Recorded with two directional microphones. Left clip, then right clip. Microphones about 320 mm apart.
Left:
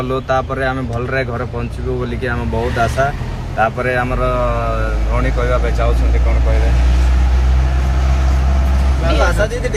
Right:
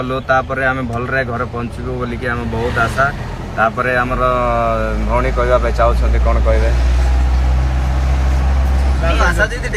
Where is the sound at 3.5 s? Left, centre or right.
Centre.